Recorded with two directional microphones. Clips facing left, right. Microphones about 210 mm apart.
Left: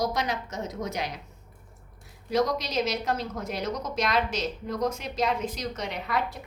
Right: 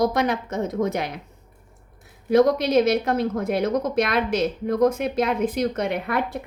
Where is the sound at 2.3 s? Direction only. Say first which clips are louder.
Right 9 dB; 55° right (ahead or behind).